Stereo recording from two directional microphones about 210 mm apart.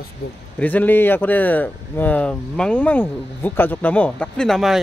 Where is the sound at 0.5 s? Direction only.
10° left (ahead or behind).